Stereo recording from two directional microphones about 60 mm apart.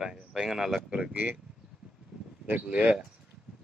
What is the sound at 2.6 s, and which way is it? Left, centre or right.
Speech, right.